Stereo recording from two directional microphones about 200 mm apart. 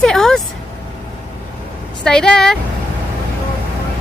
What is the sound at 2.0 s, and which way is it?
Speech, 5° left (ahead or behind).